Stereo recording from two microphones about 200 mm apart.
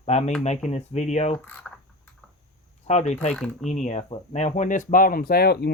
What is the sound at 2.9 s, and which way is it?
Speech, 35° left (ahead or behind).